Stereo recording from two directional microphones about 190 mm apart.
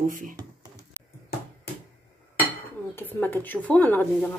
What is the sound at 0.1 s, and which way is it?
Speech, 45° right (ahead or behind).